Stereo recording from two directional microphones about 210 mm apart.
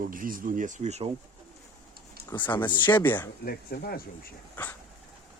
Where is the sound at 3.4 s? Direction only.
45° left (ahead or behind).